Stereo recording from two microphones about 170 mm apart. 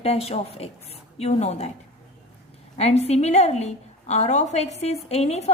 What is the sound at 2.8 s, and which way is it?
A woman's voice, 40° left (ahead or behind).